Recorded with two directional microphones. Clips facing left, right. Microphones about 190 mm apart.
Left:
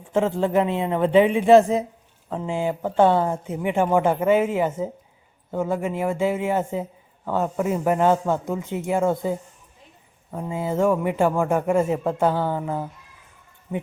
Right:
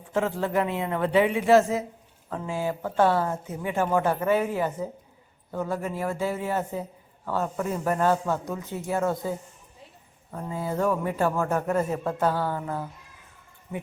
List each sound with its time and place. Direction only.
0.1 s a man's voice: 25° left (ahead or behind)
10.3 s a man's voice: 20° left (ahead or behind)